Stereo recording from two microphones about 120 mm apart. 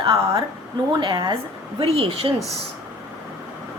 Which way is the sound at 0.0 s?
40° right (ahead or behind).